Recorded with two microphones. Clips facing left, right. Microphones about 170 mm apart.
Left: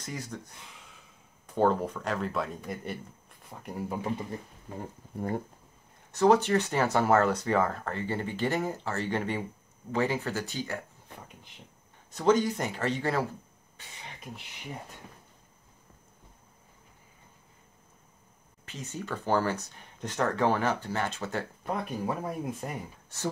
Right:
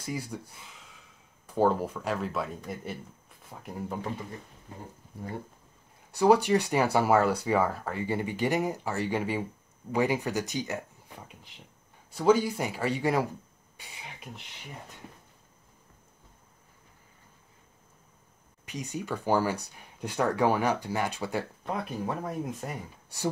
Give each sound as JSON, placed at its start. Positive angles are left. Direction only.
{"t": 0.0, "sound": "speech", "side_deg": -10}
{"t": 5.1, "sound": "speech", "side_deg": 60}
{"t": 6.1, "sound": "speech", "side_deg": -10}
{"t": 12.1, "sound": "speech", "side_deg": -10}
{"t": 18.7, "sound": "speech", "side_deg": -15}
{"t": 21.6, "sound": "speech", "side_deg": 0}